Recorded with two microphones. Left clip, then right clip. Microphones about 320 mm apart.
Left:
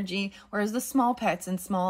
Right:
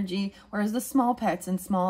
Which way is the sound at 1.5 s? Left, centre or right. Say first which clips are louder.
Right 1 dB; left.